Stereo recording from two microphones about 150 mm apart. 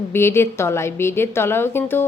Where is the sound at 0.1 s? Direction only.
15° left (ahead or behind).